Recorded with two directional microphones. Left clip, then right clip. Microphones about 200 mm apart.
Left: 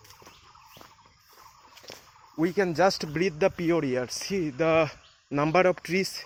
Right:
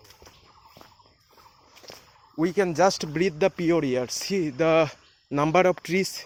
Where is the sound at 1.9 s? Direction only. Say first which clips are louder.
Even; centre (ahead or behind).